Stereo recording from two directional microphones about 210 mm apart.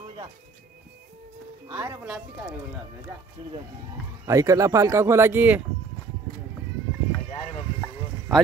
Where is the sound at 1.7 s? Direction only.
15° right (ahead or behind).